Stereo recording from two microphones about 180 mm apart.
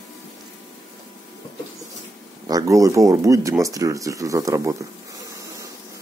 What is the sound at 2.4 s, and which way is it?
Speech, 20° right (ahead or behind).